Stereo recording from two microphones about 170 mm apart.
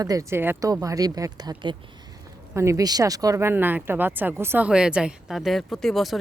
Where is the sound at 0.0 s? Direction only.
20° right (ahead or behind).